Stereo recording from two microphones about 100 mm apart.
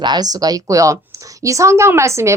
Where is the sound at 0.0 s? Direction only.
45° right (ahead or behind).